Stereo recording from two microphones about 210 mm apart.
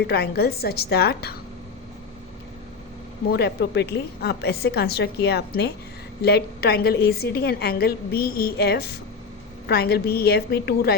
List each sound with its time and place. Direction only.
0.0 s a woman's voice: 50° left (ahead or behind)
3.2 s a woman's voice: 50° left (ahead or behind)